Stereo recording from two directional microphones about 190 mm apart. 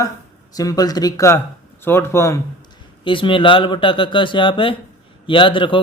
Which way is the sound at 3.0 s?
25° left (ahead or behind).